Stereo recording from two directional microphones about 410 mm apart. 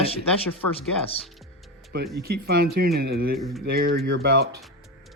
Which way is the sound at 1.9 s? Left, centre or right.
Right.